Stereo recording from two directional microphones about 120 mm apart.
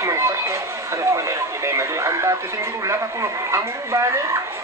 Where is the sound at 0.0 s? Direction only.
25° right (ahead or behind).